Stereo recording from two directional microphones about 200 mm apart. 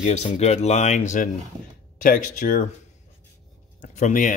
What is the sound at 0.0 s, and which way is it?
Speech, 35° left (ahead or behind).